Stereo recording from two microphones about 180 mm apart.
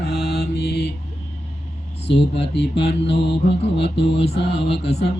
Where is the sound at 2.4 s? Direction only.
75° left (ahead or behind).